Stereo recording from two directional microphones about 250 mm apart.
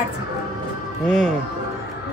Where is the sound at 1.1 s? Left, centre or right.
Centre.